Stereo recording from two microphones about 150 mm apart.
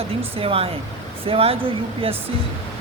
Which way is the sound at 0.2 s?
40° right (ahead or behind).